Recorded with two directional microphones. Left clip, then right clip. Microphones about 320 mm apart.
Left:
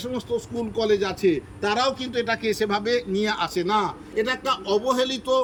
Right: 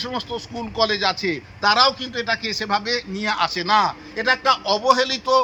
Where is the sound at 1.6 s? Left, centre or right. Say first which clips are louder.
Right 7 dB; centre.